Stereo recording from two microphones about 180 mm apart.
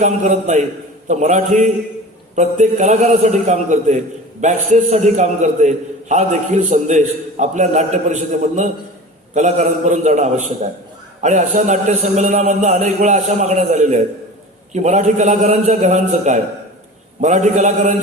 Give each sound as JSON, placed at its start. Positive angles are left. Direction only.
{"t": 0.0, "sound": "a man's voice", "side_deg": -40}